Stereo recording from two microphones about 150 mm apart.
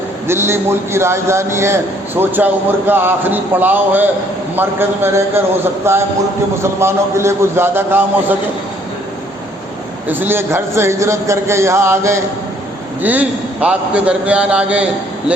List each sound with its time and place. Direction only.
0.3 s a man's voice: 15° right (ahead or behind)
10.1 s a man's voice: 15° right (ahead or behind)